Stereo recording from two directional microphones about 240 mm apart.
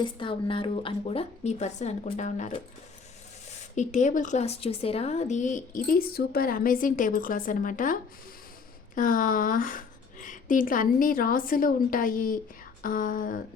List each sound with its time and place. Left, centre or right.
0.0 s a woman's voice: left
3.8 s speech: left
9.0 s speech: left